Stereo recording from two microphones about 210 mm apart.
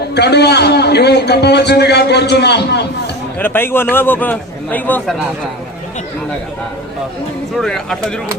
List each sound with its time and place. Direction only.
0.1 s a man's voice: 50° left (ahead or behind)
3.3 s a man's voice: 10° left (ahead or behind)
7.6 s speech: 5° left (ahead or behind)